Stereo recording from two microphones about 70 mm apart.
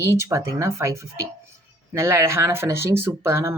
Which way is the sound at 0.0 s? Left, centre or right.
Right.